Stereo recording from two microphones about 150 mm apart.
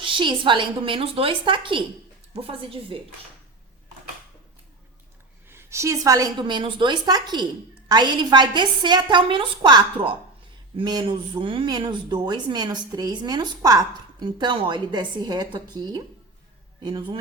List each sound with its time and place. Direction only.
0.0 s a woman's voice: 35° right (ahead or behind)
5.5 s a woman's voice: 15° right (ahead or behind); by 17.2 s 30° right (ahead or behind)